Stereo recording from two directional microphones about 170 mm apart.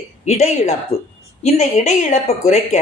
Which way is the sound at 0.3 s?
40° left (ahead or behind).